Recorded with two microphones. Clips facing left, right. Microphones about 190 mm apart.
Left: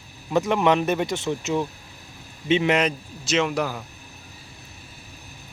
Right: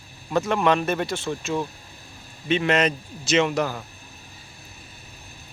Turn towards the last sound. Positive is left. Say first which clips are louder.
# right 2 dB
turn(degrees=5)  # may be behind; listen again after turning